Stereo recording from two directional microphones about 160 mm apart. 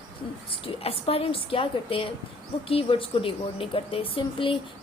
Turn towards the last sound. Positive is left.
turn(degrees=35)  # may be behind; listen again after turning